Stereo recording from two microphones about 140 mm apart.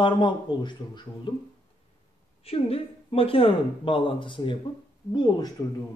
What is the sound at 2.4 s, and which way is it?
A man's voice, 45° left (ahead or behind).